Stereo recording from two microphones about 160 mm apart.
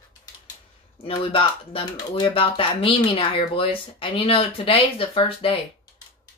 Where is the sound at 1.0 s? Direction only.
35° left (ahead or behind).